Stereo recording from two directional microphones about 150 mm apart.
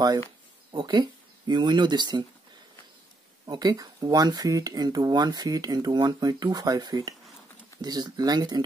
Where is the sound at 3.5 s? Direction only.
25° right (ahead or behind).